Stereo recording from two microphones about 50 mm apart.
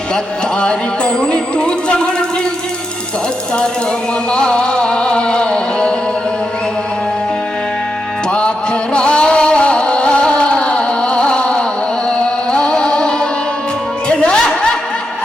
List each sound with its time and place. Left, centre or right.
0.6 s music: centre
4.3 s music: centre
8.3 s music: centre